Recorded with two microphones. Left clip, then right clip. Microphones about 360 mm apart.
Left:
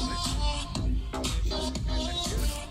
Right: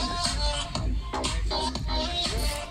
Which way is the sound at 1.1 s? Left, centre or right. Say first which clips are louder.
Right 4 dB; right.